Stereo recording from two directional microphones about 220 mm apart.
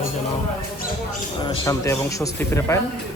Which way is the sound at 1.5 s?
15° left (ahead or behind).